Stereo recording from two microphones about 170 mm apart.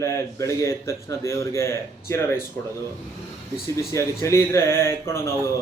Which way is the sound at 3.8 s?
15° left (ahead or behind).